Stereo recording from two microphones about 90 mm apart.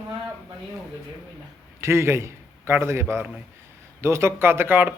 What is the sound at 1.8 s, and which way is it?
A man's voice, 30° right (ahead or behind).